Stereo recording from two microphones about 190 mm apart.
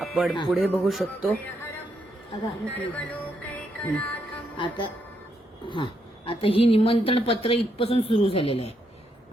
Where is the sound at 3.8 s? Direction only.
10° left (ahead or behind).